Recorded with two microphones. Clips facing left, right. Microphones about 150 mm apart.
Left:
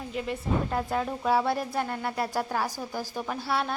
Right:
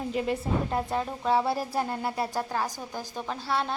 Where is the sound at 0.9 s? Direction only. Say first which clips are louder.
Even; centre (ahead or behind).